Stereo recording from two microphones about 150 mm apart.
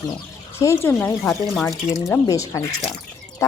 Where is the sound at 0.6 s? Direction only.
15° left (ahead or behind).